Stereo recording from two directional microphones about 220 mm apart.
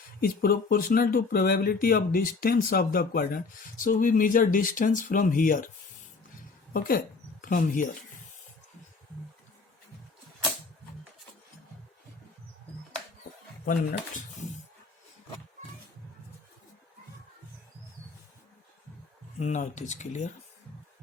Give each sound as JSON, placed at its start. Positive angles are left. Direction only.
{"t": 0.2, "sound": "speech", "side_deg": 45}
{"t": 6.7, "sound": "speech", "side_deg": 40}
{"t": 19.4, "sound": "speech", "side_deg": 30}